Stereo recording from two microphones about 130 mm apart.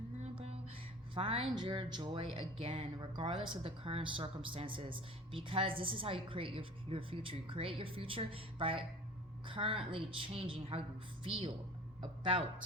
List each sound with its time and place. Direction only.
0.2 s music: 55° right (ahead or behind)
1.1 s speech: 45° right (ahead or behind)